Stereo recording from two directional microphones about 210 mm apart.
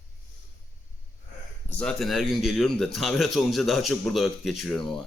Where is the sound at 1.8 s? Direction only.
Centre (ahead or behind).